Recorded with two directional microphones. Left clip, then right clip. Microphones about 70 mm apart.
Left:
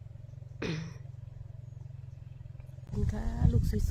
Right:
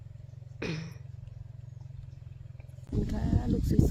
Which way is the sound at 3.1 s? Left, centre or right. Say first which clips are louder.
Right 3 dB; centre.